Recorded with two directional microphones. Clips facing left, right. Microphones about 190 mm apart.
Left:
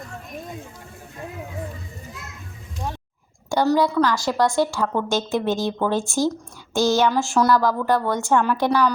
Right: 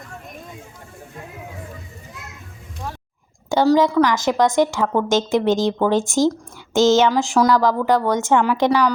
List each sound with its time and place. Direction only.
3.5 s a woman's voice: 15° right (ahead or behind)